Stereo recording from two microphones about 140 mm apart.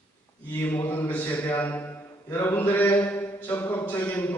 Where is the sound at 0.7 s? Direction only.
15° left (ahead or behind).